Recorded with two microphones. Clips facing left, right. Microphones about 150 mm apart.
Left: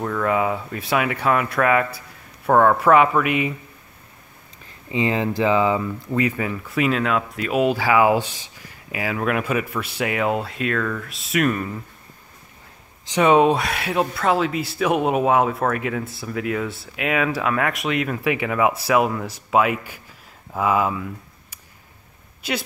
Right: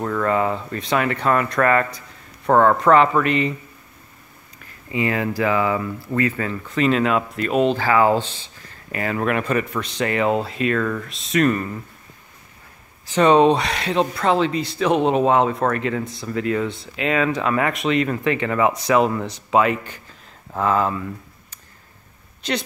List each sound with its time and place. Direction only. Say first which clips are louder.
0.0 s speech: right 1 dB; centre (ahead or behind)
4.9 s speech: left 1 dB; 20° left (ahead or behind); by 11.8 s 5° left (ahead or behind)
13.1 s speech: right 1 dB; 10° left (ahead or behind)